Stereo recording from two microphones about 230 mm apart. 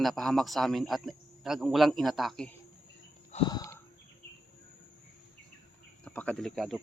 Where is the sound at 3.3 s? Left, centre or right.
Left.